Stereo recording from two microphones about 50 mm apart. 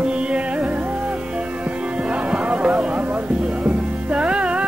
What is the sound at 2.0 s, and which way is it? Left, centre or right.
Music, right.